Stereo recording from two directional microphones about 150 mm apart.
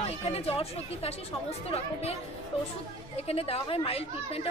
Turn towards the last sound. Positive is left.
turn(degrees=40)  # may be behind; listen again after turning